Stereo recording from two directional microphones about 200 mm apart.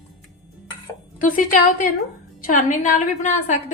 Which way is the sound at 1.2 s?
40° left (ahead or behind).